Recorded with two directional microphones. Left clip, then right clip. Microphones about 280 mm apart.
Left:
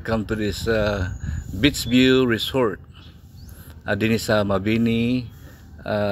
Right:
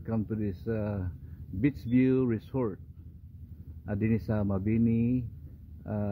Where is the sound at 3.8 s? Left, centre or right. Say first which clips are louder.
Left 12 dB; centre.